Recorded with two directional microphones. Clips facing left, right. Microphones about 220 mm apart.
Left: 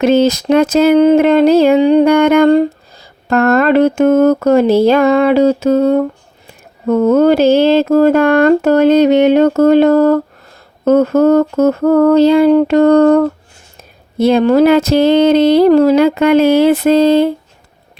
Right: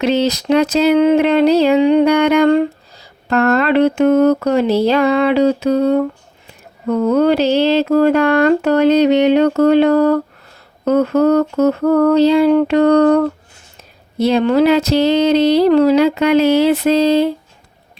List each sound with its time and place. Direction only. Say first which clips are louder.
0.0 s mantra: left 5 dB; 50° left (ahead or behind)